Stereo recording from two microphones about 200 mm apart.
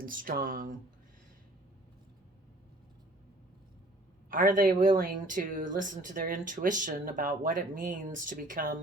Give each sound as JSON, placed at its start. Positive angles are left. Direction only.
{"t": 0.0, "sound": "speech", "side_deg": -45}
{"t": 4.3, "sound": "speech", "side_deg": -45}